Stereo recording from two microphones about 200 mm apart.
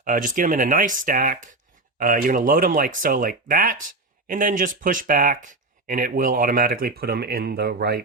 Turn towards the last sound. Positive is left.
turn(degrees=-55)  # may be behind; listen again after turning